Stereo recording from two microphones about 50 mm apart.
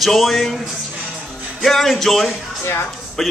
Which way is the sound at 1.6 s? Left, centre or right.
Centre.